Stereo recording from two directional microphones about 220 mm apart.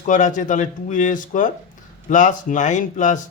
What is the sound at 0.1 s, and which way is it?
Speech, 35° left (ahead or behind).